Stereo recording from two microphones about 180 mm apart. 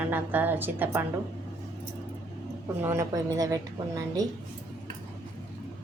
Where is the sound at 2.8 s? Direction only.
15° right (ahead or behind).